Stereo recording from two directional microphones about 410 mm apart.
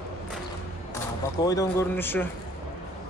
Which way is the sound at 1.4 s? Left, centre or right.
Centre.